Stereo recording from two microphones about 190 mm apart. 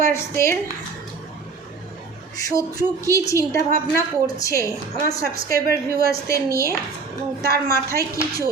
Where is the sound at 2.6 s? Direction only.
15° left (ahead or behind).